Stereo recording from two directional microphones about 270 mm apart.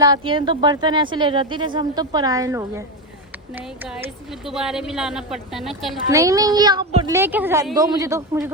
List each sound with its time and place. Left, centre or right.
0.0 s a woman's voice: centre
6.1 s speech: centre